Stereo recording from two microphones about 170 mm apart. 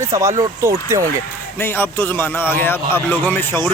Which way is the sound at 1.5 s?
15° left (ahead or behind).